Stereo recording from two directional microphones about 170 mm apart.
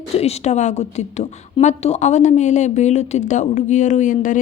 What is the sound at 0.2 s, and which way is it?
A woman's voice, 40° left (ahead or behind).